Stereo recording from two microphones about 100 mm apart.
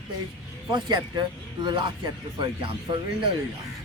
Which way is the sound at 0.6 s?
50° right (ahead or behind).